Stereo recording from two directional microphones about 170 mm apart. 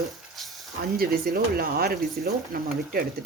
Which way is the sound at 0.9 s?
60° right (ahead or behind).